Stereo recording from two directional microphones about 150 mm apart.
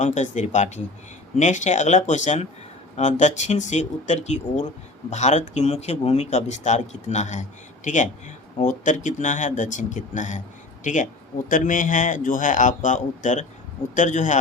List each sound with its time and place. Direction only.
0.0 s speech: 55° left (ahead or behind)
8.6 s a man's voice: 60° left (ahead or behind)